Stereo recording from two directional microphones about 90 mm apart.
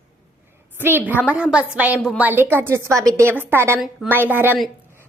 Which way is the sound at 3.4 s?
25° right (ahead or behind).